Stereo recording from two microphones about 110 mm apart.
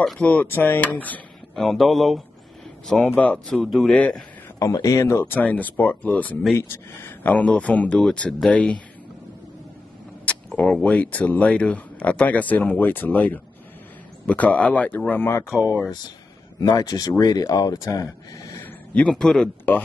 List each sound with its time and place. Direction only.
0.0 s speech: 10° left (ahead or behind)
1.5 s speech: 5° left (ahead or behind)
3.1 s speech: 10° left (ahead or behind)
4.6 s speech: 30° left (ahead or behind)
5.4 s speech: 15° left (ahead or behind)
10.2 s speech: 10° left (ahead or behind)
15.5 s speech: 10° right (ahead or behind)
16.6 s speech: 35° left (ahead or behind)
18.9 s speech: 5° left (ahead or behind)